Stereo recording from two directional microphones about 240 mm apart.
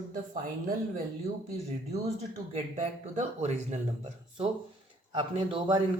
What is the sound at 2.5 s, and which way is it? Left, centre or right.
Speech, right.